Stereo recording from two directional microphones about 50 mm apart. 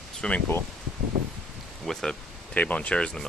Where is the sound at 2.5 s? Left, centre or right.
Left.